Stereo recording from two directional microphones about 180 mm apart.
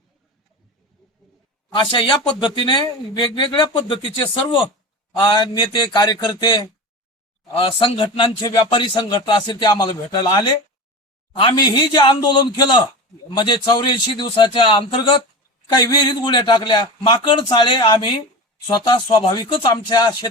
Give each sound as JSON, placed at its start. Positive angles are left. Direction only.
{"t": 1.7, "sound": "speech", "side_deg": 25}